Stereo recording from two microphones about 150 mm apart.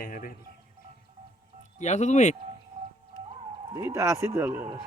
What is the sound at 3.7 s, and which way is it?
Speech, 20° right (ahead or behind).